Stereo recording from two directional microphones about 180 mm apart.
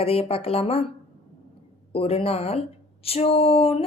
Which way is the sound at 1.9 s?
30° left (ahead or behind).